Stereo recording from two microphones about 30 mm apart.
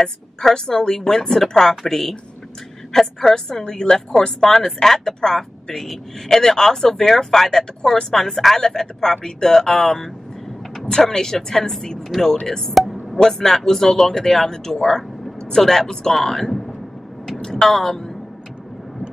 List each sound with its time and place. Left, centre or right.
0.0 s speech: centre
8.5 s speech: centre
12.1 s speech: centre
12.4 s speech: centre
12.7 s music: centre
13.3 s speech: centre
15.6 s speech: centre
15.9 s speech: centre
16.2 s speech: centre
17.4 s speech: left